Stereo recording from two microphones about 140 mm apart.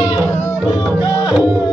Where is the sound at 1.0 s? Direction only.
30° left (ahead or behind).